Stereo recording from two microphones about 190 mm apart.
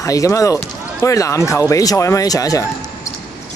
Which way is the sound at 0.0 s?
15° left (ahead or behind).